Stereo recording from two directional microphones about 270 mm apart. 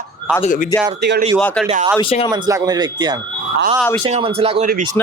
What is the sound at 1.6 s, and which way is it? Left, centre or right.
Speech, right.